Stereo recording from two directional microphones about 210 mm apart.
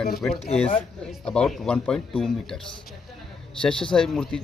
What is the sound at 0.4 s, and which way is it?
Speech, 30° left (ahead or behind).